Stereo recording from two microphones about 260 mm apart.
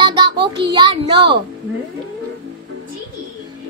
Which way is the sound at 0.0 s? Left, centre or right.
Centre.